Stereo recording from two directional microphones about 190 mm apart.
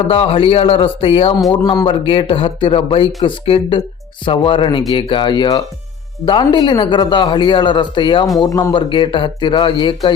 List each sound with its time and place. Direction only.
0.1 s a man's voice: 30° left (ahead or behind)
1.5 s a man's voice: 20° left (ahead or behind)